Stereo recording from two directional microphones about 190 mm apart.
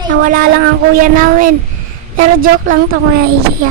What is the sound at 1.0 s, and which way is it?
A woman's voice, 45° right (ahead or behind).